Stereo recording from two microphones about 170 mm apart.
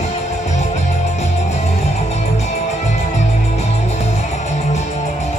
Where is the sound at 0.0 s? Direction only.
40° left (ahead or behind).